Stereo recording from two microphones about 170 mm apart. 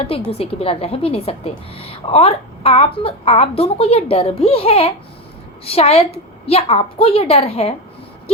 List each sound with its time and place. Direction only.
0.3 s a woman's voice: 35° left (ahead or behind)